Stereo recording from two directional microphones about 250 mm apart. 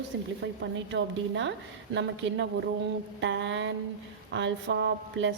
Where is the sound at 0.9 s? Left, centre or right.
Right.